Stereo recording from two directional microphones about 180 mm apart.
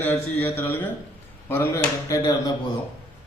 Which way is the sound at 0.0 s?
10° left (ahead or behind).